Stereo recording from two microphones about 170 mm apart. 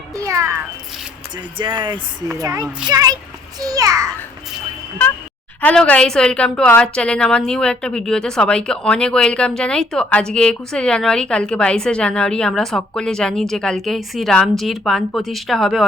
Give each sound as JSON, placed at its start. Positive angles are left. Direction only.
{"t": 0.2, "sound": "a child's voice", "side_deg": -20}
{"t": 1.5, "sound": "a child's voice", "side_deg": -30}
{"t": 5.6, "sound": "a woman's voice", "side_deg": 10}